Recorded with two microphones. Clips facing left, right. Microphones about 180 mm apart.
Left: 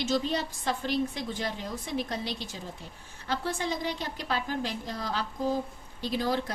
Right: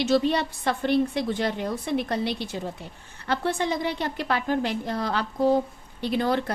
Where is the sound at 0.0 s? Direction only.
65° right (ahead or behind).